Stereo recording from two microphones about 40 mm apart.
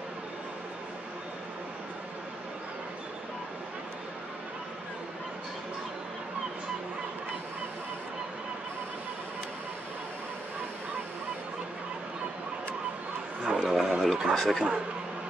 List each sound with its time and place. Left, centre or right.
13.4 s a sound: right
13.7 s speech: centre
14.3 s speech: centre